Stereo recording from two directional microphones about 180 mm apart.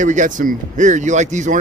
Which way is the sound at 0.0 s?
45° right (ahead or behind).